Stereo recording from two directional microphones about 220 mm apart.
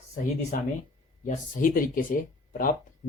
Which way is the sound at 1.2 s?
35° left (ahead or behind).